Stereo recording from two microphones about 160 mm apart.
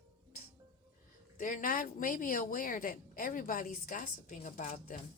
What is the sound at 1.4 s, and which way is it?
Speech, 55° left (ahead or behind).